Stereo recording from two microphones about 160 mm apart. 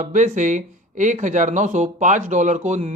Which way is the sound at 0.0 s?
50° right (ahead or behind).